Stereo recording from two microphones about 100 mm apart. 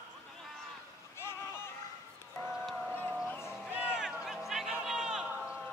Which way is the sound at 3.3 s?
25° left (ahead or behind).